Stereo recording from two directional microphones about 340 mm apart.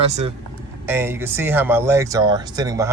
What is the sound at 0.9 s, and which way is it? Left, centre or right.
Speech, centre.